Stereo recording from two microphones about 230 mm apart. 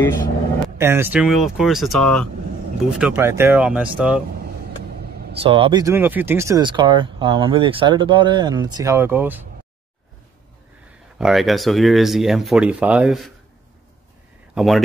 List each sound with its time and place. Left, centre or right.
0.7 s speech: centre
3.0 s speech: centre
5.3 s speech: right; by 9.4 s centre
11.1 s speech: centre
14.5 s speech: centre